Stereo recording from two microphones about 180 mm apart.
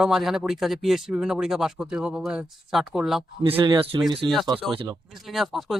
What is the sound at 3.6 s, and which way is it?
Speech, 25° right (ahead or behind).